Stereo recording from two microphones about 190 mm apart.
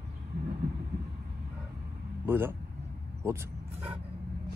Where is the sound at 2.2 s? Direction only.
10° right (ahead or behind).